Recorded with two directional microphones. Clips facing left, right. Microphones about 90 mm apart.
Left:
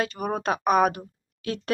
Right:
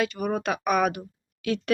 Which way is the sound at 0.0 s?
30° left (ahead or behind).